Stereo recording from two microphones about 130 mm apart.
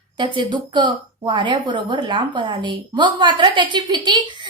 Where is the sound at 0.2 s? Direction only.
35° right (ahead or behind).